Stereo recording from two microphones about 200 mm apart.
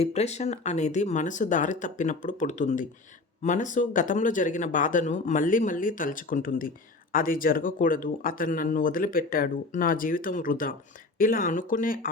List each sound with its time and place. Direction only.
0.0 s speech: 35° left (ahead or behind)